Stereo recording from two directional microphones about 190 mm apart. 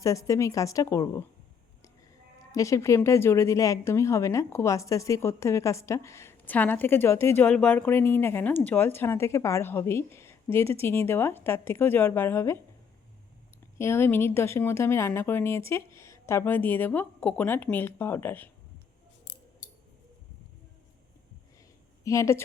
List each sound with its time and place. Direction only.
0.0 s a woman's voice: 15° left (ahead or behind)
2.5 s a woman's voice: 15° left (ahead or behind)
13.7 s a woman's voice: 10° left (ahead or behind)
22.0 s speech: 15° left (ahead or behind)